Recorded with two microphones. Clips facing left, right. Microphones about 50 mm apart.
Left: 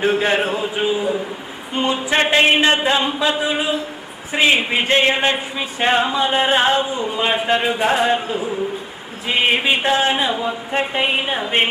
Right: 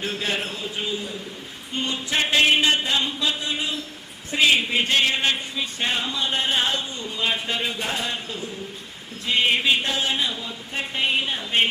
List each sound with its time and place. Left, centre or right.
0.0 s a man's voice: left
6.8 s speech: centre